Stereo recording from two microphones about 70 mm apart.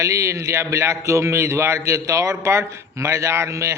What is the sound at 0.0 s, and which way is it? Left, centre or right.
A man's voice, right.